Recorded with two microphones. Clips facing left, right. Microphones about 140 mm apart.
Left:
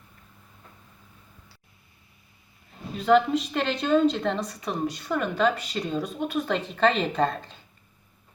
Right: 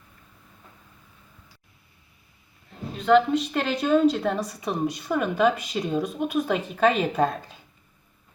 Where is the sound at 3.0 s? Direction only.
Centre (ahead or behind).